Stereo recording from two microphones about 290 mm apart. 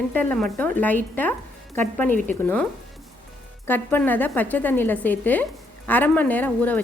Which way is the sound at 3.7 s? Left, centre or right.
Centre.